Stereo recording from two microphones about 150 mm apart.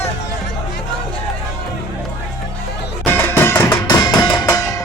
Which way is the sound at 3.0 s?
15° left (ahead or behind).